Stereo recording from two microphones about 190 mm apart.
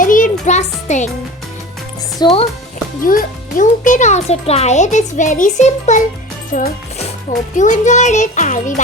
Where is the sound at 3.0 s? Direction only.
45° left (ahead or behind).